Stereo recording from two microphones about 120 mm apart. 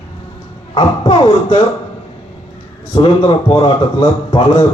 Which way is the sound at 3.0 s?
45° left (ahead or behind).